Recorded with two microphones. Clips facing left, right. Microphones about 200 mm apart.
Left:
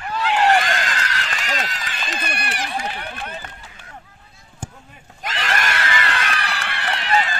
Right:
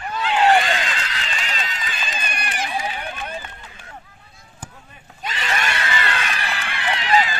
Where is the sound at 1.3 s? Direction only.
75° left (ahead or behind).